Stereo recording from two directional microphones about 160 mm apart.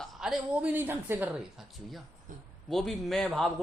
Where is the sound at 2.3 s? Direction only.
55° right (ahead or behind).